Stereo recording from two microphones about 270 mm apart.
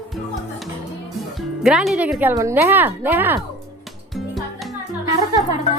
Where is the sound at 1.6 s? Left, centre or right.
Centre.